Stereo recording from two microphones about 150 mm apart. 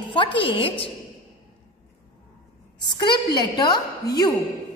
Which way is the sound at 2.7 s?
30° left (ahead or behind).